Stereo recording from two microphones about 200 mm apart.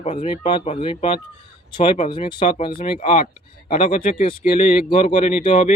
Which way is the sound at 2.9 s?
40° left (ahead or behind).